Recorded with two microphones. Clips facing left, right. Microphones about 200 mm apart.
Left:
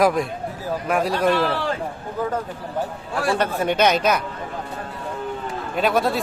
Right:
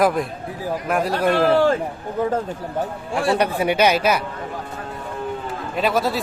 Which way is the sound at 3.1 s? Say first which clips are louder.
Right 2 dB; 20° right (ahead or behind).